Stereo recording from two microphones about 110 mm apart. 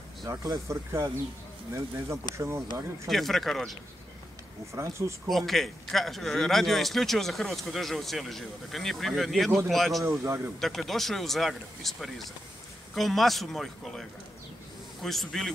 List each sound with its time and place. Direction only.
0.3 s speech: 30° right (ahead or behind)
3.1 s a man's voice: centre (ahead or behind)
4.7 s speech: 25° right (ahead or behind)
5.3 s a man's voice: centre (ahead or behind)
10.0 s speech: 25° right (ahead or behind)
10.6 s a man's voice: centre (ahead or behind)
15.0 s a man's voice: centre (ahead or behind)